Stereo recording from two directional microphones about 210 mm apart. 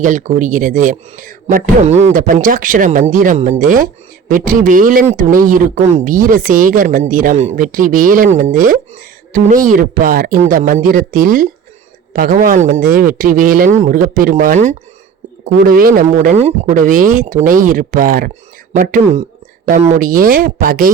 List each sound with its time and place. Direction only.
0.0 s a man's voice: 40° right (ahead or behind)